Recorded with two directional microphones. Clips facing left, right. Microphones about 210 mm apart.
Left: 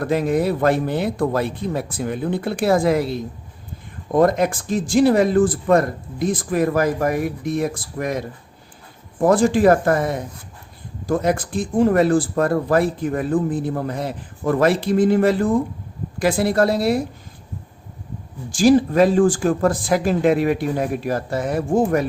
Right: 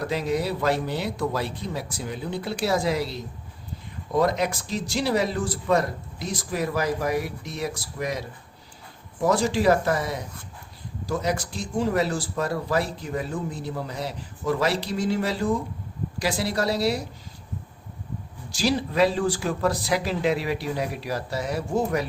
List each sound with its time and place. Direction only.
0.0 s speech: 50° left (ahead or behind)
18.5 s speech: 50° left (ahead or behind)